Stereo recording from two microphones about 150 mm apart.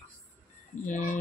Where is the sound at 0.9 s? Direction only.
55° left (ahead or behind).